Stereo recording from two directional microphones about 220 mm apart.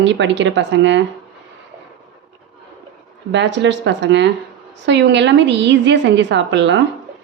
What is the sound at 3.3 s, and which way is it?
A woman's voice, 55° right (ahead or behind).